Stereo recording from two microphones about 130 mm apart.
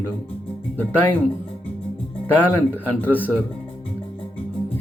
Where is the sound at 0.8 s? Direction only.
15° left (ahead or behind).